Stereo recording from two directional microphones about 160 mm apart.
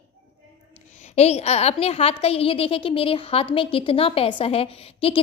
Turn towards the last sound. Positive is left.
turn(degrees=35)  # may be behind; listen again after turning